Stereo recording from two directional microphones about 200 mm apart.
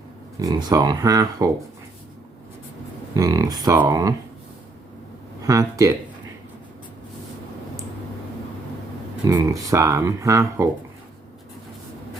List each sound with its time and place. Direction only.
0.3 s speech: 20° right (ahead or behind)
3.2 s speech: 15° right (ahead or behind)
5.4 s speech: 15° right (ahead or behind)
9.2 s speech: 15° right (ahead or behind)